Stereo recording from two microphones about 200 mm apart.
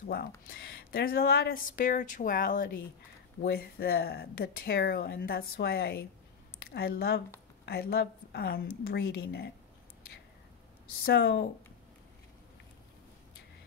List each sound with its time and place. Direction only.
0.5 s speech: 55° left (ahead or behind)
11.1 s speech: 60° left (ahead or behind)